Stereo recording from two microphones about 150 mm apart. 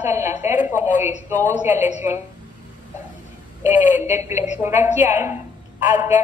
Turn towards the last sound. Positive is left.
turn(degrees=-15)  # may be behind; listen again after turning